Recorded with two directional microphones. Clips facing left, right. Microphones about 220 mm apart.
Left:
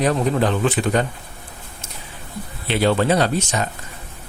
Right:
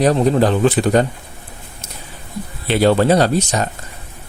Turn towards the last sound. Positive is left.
turn(degrees=-40)  # may be behind; listen again after turning